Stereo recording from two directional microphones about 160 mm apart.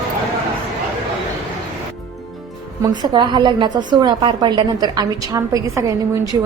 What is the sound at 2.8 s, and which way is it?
A woman's voice, 30° right (ahead or behind).